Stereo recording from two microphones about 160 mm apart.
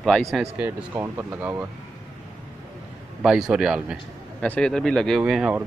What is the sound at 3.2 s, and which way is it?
Speech, 5° right (ahead or behind).